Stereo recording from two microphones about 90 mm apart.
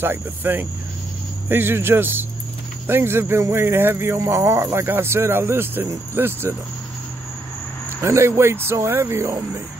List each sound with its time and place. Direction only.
0.0 s speech: 20° right (ahead or behind)
8.0 s speech: 30° right (ahead or behind)